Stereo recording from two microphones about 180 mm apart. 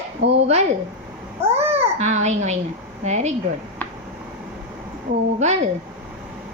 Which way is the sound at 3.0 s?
40° right (ahead or behind).